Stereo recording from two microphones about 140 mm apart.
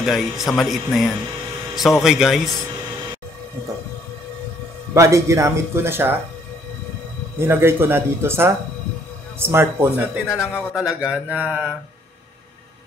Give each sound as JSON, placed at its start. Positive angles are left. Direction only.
{"t": 0.0, "sound": "speech", "side_deg": 0}
{"t": 4.9, "sound": "speech", "side_deg": -20}
{"t": 7.3, "sound": "a man's voice", "side_deg": -15}